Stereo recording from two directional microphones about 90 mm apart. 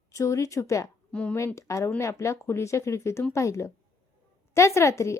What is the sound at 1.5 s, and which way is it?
A woman's voice, 35° left (ahead or behind).